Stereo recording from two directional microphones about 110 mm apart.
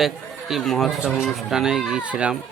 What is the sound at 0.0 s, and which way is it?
A man's voice, centre (ahead or behind).